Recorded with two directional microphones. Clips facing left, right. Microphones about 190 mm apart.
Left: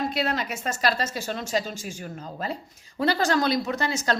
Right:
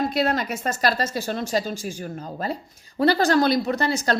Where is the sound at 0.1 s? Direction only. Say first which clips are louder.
Right 4 dB; 40° right (ahead or behind).